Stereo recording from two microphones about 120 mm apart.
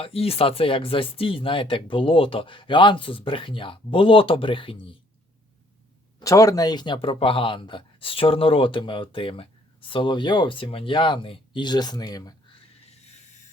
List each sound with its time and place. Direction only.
0.0 s speech: 55° left (ahead or behind)
6.1 s speech: 30° left (ahead or behind)